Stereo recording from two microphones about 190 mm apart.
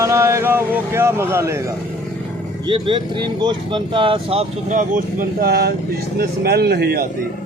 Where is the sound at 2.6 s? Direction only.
25° right (ahead or behind); by 7.1 s 55° right (ahead or behind).